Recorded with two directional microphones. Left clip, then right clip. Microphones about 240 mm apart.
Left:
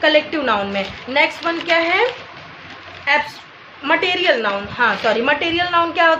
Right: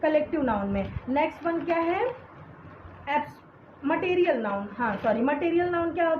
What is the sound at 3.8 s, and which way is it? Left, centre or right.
A woman's voice, left.